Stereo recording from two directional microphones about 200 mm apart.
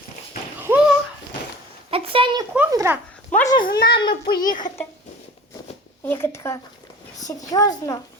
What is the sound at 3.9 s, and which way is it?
Speech, 25° left (ahead or behind).